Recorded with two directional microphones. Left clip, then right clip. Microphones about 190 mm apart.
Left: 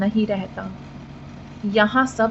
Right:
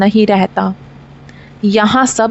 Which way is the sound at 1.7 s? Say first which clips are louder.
Right 7 dB; 65° right (ahead or behind).